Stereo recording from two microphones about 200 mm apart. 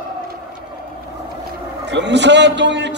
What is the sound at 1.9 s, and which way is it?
A man's voice, 60° right (ahead or behind).